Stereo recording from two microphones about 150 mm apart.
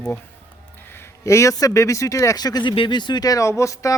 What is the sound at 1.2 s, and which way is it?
Speech, 20° left (ahead or behind).